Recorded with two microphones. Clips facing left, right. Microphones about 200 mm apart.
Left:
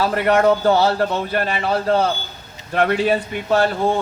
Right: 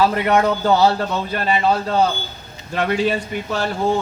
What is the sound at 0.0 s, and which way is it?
A man's voice, 50° left (ahead or behind).